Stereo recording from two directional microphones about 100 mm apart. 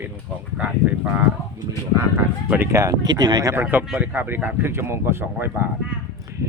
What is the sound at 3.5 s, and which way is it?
Speech, 20° right (ahead or behind).